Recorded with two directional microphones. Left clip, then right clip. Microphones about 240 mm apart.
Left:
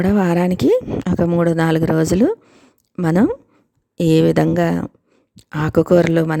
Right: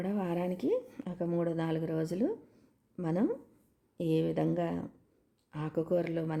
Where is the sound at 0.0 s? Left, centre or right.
Left.